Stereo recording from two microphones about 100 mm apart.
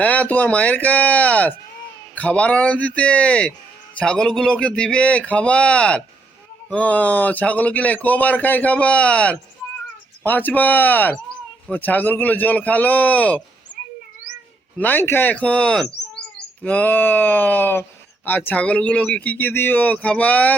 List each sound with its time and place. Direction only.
0.0 s speech: 15° left (ahead or behind)
14.8 s speech: 20° left (ahead or behind)
16.6 s a sound: 15° left (ahead or behind)
18.3 s speech: 15° left (ahead or behind)